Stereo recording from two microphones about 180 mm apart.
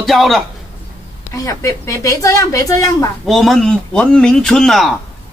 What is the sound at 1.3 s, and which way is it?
A woman's voice, 15° left (ahead or behind).